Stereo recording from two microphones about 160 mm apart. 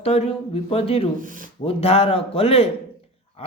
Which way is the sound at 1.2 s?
55° right (ahead or behind).